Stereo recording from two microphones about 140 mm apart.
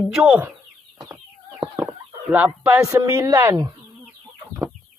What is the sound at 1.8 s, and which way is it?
Chicken, 10° right (ahead or behind).